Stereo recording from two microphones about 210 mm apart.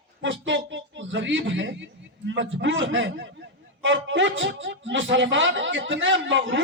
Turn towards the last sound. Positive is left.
turn(degrees=-60)  # may be behind; listen again after turning